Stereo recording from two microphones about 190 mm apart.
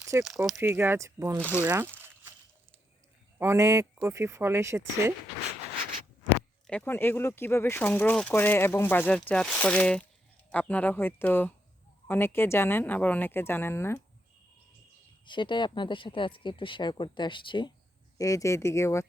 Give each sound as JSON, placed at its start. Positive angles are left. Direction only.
{"t": 0.0, "sound": "a sound", "side_deg": -15}
{"t": 0.6, "sound": "speech", "side_deg": -10}
{"t": 1.4, "sound": "speech", "side_deg": 10}
{"t": 1.6, "sound": "speech", "side_deg": -10}
{"t": 2.0, "sound": "a sound", "side_deg": -10}
{"t": 3.3, "sound": "speech", "side_deg": -15}
{"t": 6.7, "sound": "speech", "side_deg": 10}
{"t": 15.2, "sound": "speech", "side_deg": 25}